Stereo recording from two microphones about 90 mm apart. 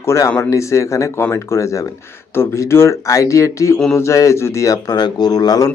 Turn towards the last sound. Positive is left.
turn(degrees=45)  # may be behind; listen again after turning